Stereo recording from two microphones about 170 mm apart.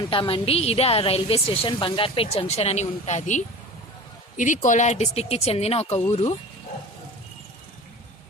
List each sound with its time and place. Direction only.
0.1 s a woman's voice: 30° left (ahead or behind)